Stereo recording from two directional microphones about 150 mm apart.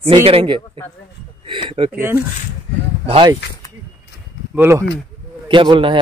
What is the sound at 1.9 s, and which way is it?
Speech, 15° right (ahead or behind).